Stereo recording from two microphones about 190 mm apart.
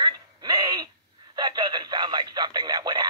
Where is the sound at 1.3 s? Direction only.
25° right (ahead or behind).